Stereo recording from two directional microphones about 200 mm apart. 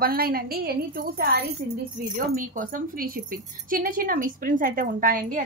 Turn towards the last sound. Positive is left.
turn(degrees=-45)  # may be behind; listen again after turning